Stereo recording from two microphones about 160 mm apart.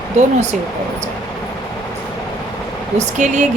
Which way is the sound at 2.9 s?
50° right (ahead or behind).